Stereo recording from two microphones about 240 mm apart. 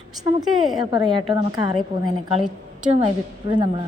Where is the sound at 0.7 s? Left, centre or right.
Centre.